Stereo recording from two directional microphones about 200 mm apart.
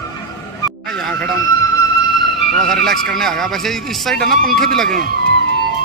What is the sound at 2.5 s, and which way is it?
Speech, centre (ahead or behind).